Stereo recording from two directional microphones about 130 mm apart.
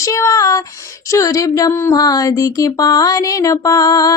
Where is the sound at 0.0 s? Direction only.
25° left (ahead or behind).